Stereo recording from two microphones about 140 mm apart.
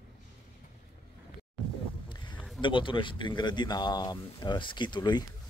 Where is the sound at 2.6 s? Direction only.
35° left (ahead or behind).